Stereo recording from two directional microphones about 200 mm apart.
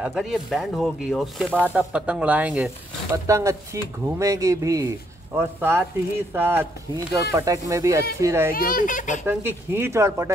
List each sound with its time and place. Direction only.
0.0 s speech: centre (ahead or behind)
8.5 s a child's voice: 40° left (ahead or behind)
9.2 s speech: 10° right (ahead or behind)